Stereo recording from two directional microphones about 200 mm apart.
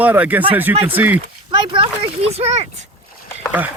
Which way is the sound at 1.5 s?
25° right (ahead or behind).